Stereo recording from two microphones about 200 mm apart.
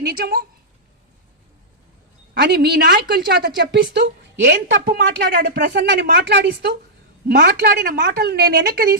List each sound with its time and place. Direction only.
0.0 s speech: 50° right (ahead or behind)
2.5 s a woman's voice: 50° right (ahead or behind)